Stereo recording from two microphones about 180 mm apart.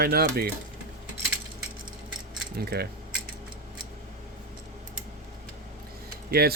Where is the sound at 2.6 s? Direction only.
60° right (ahead or behind).